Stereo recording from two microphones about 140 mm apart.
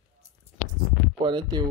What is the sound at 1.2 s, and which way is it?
Speech, 35° right (ahead or behind).